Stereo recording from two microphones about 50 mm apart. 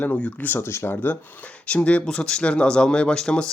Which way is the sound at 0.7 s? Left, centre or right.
Left.